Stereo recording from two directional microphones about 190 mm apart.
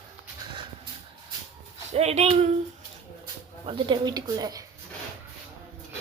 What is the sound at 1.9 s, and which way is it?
Speech, 35° right (ahead or behind).